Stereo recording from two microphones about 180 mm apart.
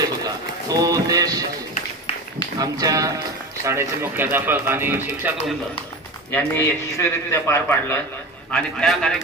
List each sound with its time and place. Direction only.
0.2 s speech: 20° right (ahead or behind)
2.6 s speech: 20° right (ahead or behind)
6.3 s a man's voice: 10° left (ahead or behind)
8.5 s a man's voice: 5° left (ahead or behind)